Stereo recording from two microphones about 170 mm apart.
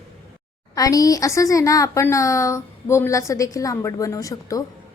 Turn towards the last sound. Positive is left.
turn(degrees=20)  # may be behind; listen again after turning